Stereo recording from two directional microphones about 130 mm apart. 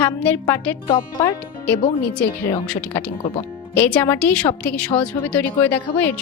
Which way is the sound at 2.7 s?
10° left (ahead or behind).